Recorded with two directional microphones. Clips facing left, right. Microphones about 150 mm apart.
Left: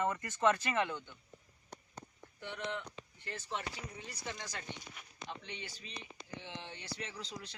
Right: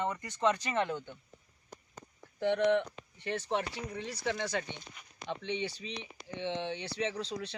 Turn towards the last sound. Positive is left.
turn(degrees=-65)  # may be behind; listen again after turning